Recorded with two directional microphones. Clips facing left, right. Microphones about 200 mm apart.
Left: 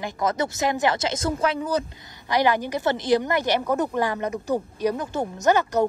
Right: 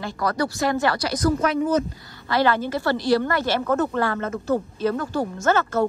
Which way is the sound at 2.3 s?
15° left (ahead or behind).